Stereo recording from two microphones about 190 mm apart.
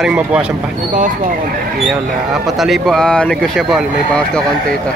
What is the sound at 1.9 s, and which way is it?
Speech, centre (ahead or behind).